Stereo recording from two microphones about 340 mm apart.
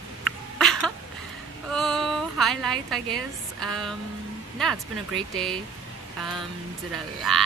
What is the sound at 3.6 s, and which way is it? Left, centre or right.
Speech, centre.